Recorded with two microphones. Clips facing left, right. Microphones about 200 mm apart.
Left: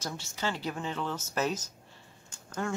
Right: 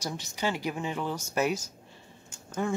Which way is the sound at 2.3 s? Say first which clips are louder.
Right 4 dB; 10° right (ahead or behind).